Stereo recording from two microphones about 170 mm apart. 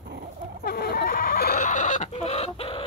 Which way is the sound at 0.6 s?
70° left (ahead or behind).